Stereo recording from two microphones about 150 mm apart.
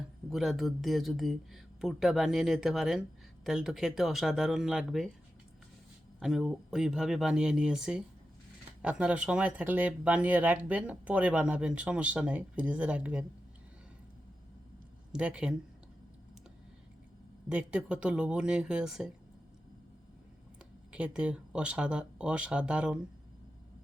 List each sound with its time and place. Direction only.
0.3 s speech: centre (ahead or behind)
6.1 s speech: centre (ahead or behind)
15.1 s speech: 5° right (ahead or behind)
17.5 s speech: 5° right (ahead or behind)
20.9 s speech: 5° right (ahead or behind)